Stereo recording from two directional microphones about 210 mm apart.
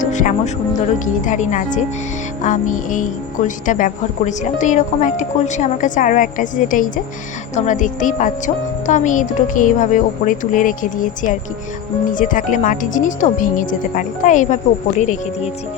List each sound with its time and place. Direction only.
0.0 s music: 35° left (ahead or behind)
0.9 s a woman's voice: 35° left (ahead or behind)